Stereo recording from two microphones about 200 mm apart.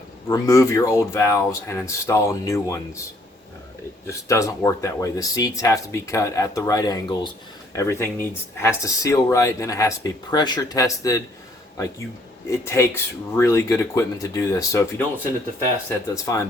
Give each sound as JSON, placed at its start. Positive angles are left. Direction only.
{"t": 0.3, "sound": "speech", "side_deg": 15}
{"t": 4.0, "sound": "speech", "side_deg": 15}
{"t": 12.5, "sound": "speech", "side_deg": 15}
{"t": 16.1, "sound": "speech", "side_deg": 15}